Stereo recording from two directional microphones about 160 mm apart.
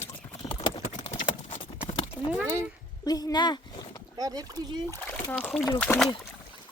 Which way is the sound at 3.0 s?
25° left (ahead or behind).